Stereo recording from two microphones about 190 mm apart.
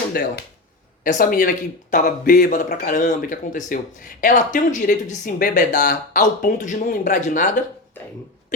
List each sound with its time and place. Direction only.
0.1 s speech: 55° left (ahead or behind)